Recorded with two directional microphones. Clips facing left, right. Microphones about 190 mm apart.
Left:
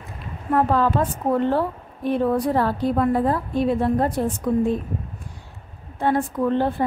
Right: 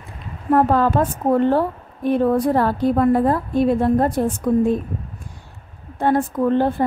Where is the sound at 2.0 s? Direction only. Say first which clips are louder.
Right 3 dB; 50° right (ahead or behind).